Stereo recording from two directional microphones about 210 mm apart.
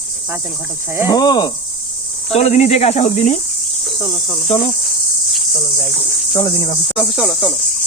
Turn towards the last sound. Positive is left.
turn(degrees=0)  # may be behind; listen again after turning